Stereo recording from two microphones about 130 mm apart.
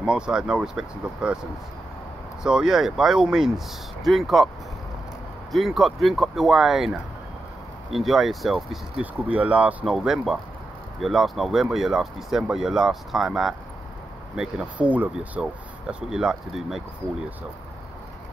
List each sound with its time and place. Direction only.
0.0 s speech: 5° right (ahead or behind)
2.4 s speech: 5° right (ahead or behind)
5.5 s speech: centre (ahead or behind)
9.0 s speech: 10° right (ahead or behind)